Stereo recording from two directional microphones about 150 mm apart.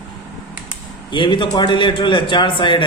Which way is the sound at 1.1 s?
30° left (ahead or behind).